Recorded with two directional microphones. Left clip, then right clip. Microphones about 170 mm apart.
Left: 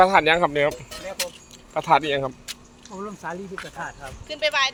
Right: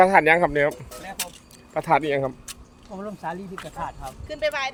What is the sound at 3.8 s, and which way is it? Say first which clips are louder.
Speech: right 1 dB; 90° right.